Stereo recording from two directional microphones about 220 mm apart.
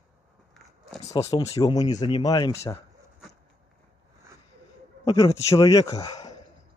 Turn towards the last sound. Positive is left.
turn(degrees=15)  # may be behind; listen again after turning